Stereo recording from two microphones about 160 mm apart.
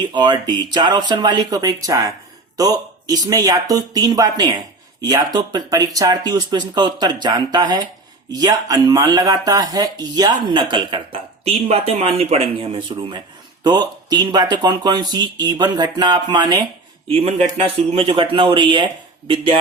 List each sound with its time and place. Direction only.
0.0 s speech: 30° right (ahead or behind)
17.1 s speech: 40° right (ahead or behind)